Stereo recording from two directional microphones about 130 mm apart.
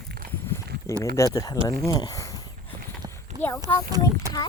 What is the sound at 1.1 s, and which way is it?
Speech, 25° left (ahead or behind).